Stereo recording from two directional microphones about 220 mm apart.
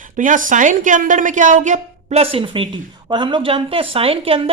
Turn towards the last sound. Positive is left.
turn(degrees=-25)  # may be behind; listen again after turning